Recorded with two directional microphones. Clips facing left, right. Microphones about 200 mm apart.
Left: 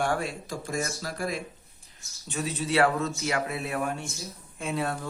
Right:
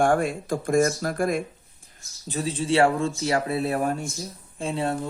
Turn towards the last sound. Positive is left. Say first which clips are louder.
# right 4 dB
turn(degrees=-25)  # may be behind; listen again after turning